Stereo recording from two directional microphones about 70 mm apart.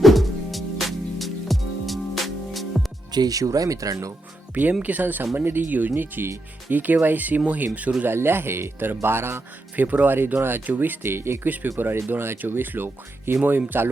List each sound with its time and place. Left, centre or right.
0.0 s music: centre
3.1 s speech: right
4.7 s speech: right
8.0 s speech: right
9.7 s speech: right
11.4 s speech: right